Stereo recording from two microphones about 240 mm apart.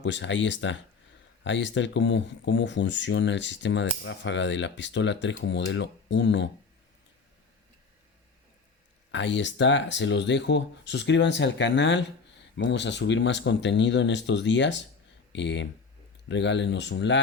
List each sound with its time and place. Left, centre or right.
0.0 s speech: left
9.1 s speech: left